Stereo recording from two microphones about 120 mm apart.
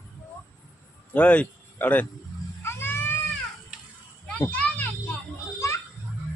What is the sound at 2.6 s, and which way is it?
Cat, 20° left (ahead or behind).